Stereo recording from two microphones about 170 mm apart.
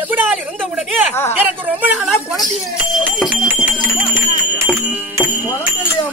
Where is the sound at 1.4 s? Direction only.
10° right (ahead or behind).